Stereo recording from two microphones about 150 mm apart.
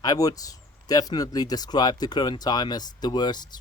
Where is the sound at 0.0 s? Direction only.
25° left (ahead or behind).